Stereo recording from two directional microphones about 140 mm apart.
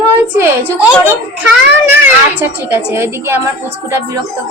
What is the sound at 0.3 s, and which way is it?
A woman's voice, 15° right (ahead or behind).